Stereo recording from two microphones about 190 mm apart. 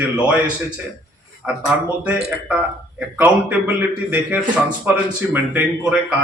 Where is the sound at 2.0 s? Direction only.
5° right (ahead or behind).